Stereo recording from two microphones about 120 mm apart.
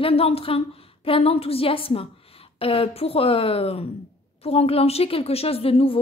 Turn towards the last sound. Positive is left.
turn(degrees=55)  # may be behind; listen again after turning